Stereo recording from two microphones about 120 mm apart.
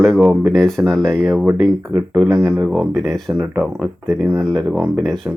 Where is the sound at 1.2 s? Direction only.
20° right (ahead or behind).